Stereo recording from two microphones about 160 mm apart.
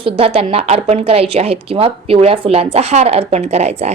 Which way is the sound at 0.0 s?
35° right (ahead or behind).